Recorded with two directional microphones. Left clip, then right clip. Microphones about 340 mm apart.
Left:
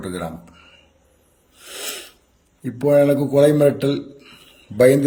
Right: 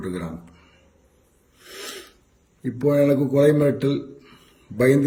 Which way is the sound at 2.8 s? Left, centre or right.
Left.